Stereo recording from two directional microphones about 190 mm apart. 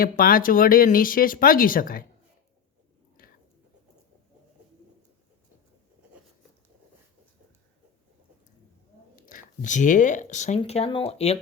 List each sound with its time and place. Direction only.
0.0 s speech: 50° left (ahead or behind)
3.2 s chewing: 50° left (ahead or behind)
9.1 s speech: 45° left (ahead or behind)